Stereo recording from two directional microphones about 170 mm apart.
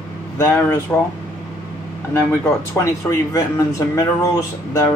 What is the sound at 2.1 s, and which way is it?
Speech, 15° left (ahead or behind).